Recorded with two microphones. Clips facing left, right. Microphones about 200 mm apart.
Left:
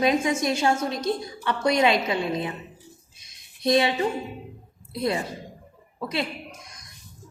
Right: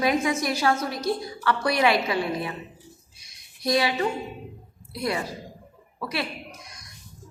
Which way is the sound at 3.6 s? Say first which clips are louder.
Left 2 dB; 25° left (ahead or behind).